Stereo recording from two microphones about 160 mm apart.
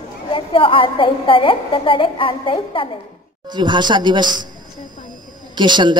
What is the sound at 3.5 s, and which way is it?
A man's voice, 30° right (ahead or behind).